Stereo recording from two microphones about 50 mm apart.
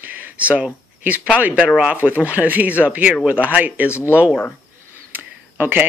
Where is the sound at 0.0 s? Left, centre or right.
Right.